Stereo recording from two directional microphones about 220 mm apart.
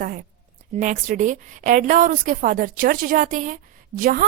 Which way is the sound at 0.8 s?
35° right (ahead or behind).